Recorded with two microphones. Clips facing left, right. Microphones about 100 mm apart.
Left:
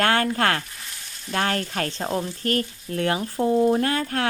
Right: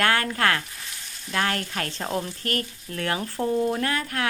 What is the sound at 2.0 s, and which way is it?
Speech, 20° left (ahead or behind).